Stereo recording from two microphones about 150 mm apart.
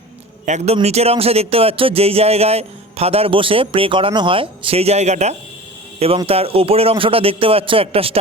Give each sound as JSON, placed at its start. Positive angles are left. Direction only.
{"t": 0.4, "sound": "speech", "side_deg": -45}